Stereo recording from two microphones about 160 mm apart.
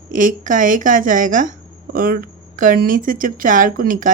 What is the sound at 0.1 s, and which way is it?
A woman's voice, 55° right (ahead or behind).